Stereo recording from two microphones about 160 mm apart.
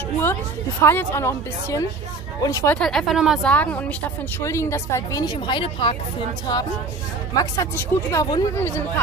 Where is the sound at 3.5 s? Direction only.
10° left (ahead or behind).